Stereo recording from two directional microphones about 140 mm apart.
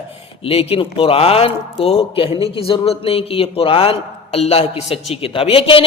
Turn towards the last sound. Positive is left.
turn(degrees=40)  # may be behind; listen again after turning